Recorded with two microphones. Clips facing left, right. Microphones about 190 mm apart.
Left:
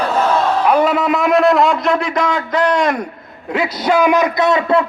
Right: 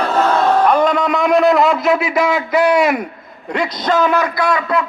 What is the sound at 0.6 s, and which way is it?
A man's voice, 5° left (ahead or behind).